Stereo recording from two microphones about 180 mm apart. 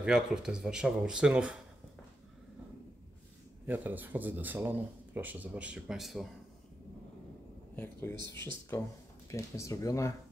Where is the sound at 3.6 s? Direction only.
10° right (ahead or behind).